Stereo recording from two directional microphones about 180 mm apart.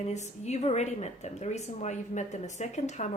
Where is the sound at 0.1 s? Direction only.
40° left (ahead or behind).